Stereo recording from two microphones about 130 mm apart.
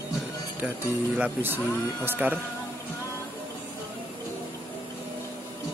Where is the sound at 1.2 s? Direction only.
15° right (ahead or behind).